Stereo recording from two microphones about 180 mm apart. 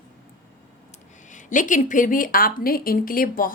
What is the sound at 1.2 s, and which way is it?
A woman's voice, 45° left (ahead or behind).